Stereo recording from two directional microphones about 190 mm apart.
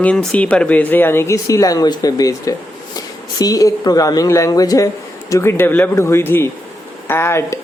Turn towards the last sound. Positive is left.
turn(degrees=15)  # may be behind; listen again after turning